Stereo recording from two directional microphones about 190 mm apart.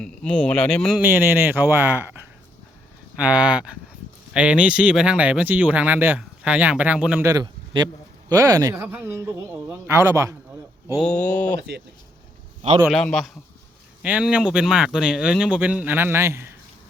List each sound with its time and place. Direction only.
0.0 s speech: 5° left (ahead or behind)
0.9 s speech: 10° right (ahead or behind)
3.2 s speech: 5° right (ahead or behind)
7.3 s a man's voice: 20° right (ahead or behind)
11.0 s speech: 5° left (ahead or behind)
12.9 s speech: centre (ahead or behind)